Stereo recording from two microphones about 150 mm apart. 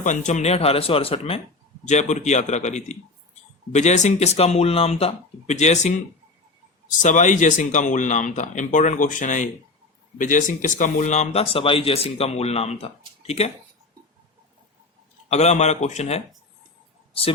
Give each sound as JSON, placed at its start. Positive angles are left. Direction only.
{"t": 0.0, "sound": "speech", "side_deg": 55}
{"t": 1.9, "sound": "speech", "side_deg": 50}
{"t": 7.0, "sound": "speech", "side_deg": 55}
{"t": 15.3, "sound": "speech", "side_deg": 50}